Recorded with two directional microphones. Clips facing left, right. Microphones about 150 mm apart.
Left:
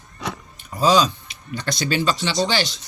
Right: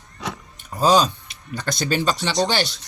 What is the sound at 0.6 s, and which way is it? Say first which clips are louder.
Speech: even; 50° right (ahead or behind).